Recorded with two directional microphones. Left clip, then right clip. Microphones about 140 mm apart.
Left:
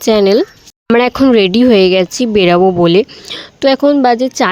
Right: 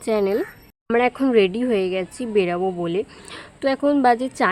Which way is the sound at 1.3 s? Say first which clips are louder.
Left 9 dB; 60° left (ahead or behind).